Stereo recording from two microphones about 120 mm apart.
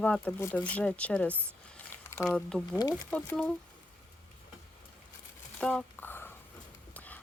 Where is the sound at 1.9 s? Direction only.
20° left (ahead or behind).